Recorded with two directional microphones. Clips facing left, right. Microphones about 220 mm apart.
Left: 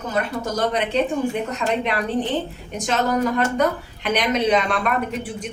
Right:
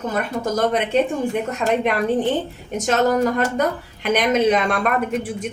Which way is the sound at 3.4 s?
45° right (ahead or behind).